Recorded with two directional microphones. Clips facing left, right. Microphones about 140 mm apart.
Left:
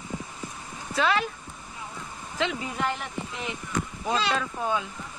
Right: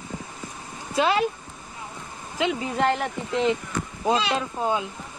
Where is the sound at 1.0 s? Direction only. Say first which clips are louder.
Right 3 dB; 25° right (ahead or behind).